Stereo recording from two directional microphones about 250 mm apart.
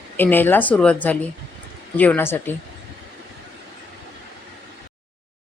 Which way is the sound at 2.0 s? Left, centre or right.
Centre.